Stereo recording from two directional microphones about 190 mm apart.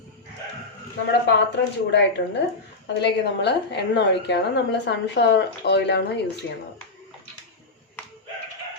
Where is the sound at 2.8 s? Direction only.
65° left (ahead or behind).